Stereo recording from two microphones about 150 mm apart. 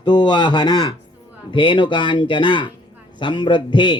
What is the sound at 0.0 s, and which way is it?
Speech, 30° left (ahead or behind).